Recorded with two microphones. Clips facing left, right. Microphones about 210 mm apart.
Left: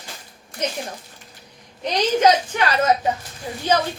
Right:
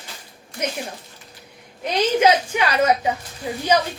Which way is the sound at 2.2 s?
10° right (ahead or behind).